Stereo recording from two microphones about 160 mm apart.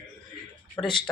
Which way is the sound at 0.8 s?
30° left (ahead or behind).